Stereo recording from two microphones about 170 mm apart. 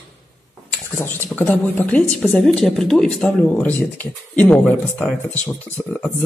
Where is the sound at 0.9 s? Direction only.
15° left (ahead or behind).